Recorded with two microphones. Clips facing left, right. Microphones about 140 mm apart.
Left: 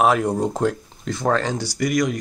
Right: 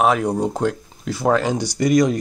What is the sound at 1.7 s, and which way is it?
Speech, 25° right (ahead or behind).